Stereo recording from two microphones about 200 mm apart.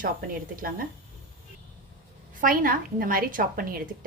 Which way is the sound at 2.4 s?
45° right (ahead or behind).